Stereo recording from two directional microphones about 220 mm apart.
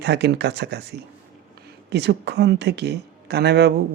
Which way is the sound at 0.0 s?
50° right (ahead or behind).